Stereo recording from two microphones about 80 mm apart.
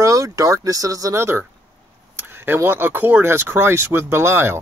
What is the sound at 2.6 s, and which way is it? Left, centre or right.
Speech, right.